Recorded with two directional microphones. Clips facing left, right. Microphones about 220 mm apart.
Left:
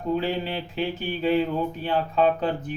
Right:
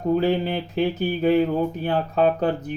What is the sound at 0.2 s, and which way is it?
Speech, 45° right (ahead or behind).